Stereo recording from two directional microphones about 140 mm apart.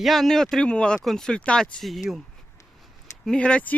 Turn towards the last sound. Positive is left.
turn(degrees=10)  # may be behind; listen again after turning